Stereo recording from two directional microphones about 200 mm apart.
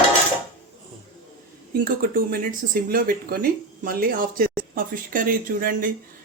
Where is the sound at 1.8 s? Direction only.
45° right (ahead or behind).